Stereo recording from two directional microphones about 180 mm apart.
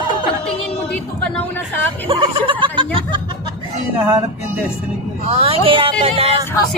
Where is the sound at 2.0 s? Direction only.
30° right (ahead or behind).